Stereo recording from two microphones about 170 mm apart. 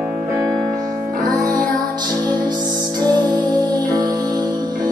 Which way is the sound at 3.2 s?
25° right (ahead or behind).